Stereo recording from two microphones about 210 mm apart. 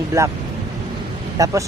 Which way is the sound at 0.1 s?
15° right (ahead or behind).